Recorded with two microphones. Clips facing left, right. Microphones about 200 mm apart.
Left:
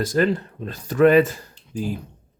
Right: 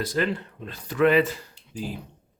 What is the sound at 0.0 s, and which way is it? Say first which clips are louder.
Speech: left 6 dB; 45° left (ahead or behind).